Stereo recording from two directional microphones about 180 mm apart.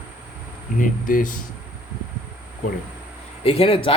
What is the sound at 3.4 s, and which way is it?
Speech, 30° left (ahead or behind).